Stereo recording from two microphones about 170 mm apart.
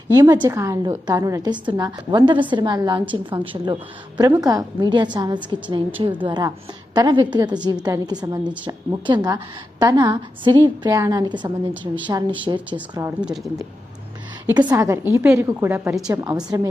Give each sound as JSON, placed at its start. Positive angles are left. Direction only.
{"t": 0.1, "sound": "a woman's voice", "side_deg": -20}
{"t": 13.2, "sound": "speech", "side_deg": 0}
{"t": 14.5, "sound": "a woman's voice", "side_deg": -25}
{"t": 16.2, "sound": "a woman's voice", "side_deg": -20}